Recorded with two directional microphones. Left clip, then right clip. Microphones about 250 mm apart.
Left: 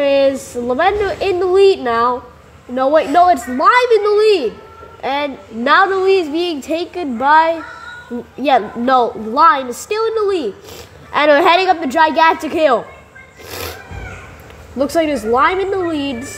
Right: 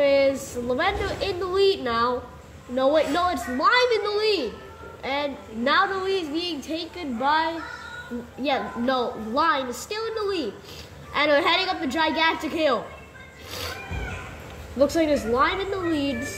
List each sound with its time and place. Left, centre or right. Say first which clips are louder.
0.0 s a woman's voice: left 7 dB; left
13.5 s cat: left 6 dB; left
14.8 s a woman's voice: left 5 dB; left